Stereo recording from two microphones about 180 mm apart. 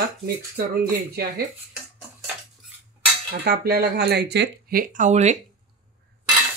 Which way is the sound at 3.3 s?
60° right (ahead or behind).